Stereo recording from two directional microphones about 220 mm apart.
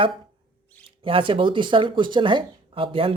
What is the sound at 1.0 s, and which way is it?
Speech, 25° right (ahead or behind).